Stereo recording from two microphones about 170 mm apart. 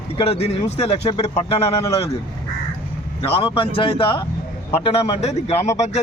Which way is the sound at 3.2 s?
30° left (ahead or behind).